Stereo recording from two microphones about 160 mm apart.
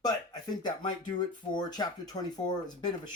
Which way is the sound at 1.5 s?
25° left (ahead or behind).